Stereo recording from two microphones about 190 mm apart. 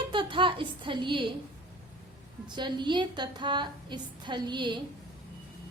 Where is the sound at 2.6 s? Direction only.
25° right (ahead or behind).